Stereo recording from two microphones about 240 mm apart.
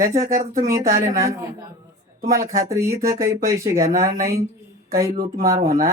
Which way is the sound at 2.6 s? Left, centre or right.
Centre.